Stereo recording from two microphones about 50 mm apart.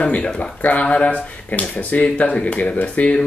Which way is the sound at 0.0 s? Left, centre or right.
Left.